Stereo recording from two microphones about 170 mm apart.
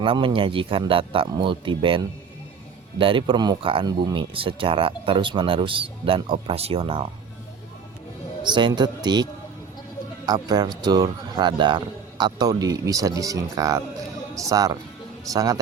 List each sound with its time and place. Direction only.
0.0 s speech: 30° right (ahead or behind)
8.4 s speech: 25° right (ahead or behind)
10.2 s speech: 25° right (ahead or behind)